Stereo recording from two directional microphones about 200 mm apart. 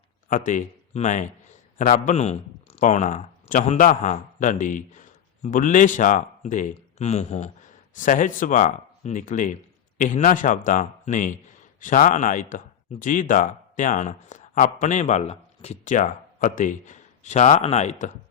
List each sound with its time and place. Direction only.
0.3 s speech: 40° left (ahead or behind)